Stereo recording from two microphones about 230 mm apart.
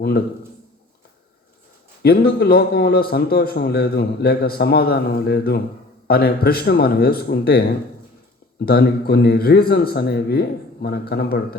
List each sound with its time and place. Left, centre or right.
0.0 s a man's voice: left
2.0 s a man's voice: left